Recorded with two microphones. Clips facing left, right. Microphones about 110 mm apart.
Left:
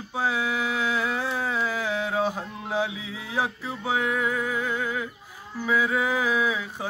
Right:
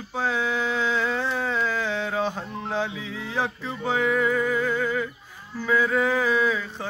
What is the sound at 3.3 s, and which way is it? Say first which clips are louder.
Music: even; 5° left (ahead or behind).